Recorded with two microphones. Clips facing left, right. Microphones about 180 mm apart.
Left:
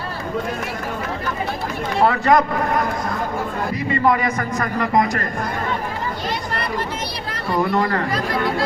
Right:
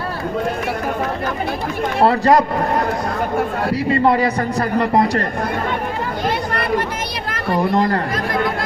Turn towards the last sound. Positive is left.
turn(degrees=-35)  # may be behind; listen again after turning